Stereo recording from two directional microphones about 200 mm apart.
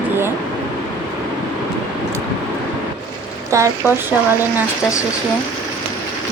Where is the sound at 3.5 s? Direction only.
15° right (ahead or behind).